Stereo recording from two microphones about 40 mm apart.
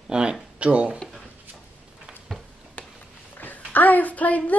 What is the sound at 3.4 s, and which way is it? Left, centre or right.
A child's voice, left.